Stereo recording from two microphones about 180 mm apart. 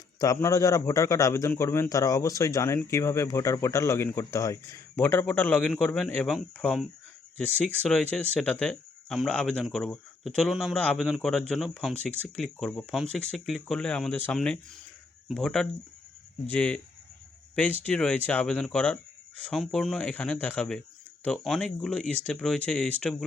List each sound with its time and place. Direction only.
0.2 s a man's voice: 15° left (ahead or behind)